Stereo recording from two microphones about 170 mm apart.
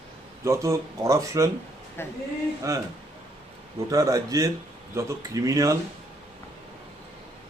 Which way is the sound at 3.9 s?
20° right (ahead or behind).